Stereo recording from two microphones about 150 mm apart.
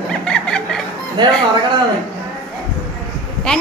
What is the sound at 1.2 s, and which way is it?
Speech, 30° right (ahead or behind).